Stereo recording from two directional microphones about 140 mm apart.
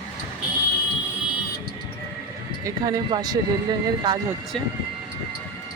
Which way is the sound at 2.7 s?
30° right (ahead or behind).